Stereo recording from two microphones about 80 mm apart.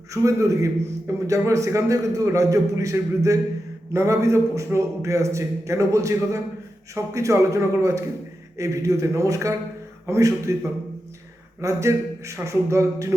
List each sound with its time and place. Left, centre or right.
0.1 s a man's voice: right
3.9 s a man's voice: right